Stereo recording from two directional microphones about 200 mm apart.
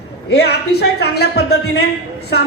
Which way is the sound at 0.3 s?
55° left (ahead or behind).